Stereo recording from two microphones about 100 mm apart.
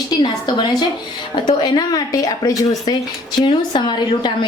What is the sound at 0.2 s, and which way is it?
A woman's voice, 45° left (ahead or behind).